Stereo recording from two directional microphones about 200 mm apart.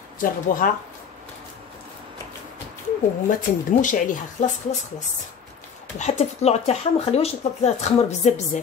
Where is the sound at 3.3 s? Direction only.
40° left (ahead or behind).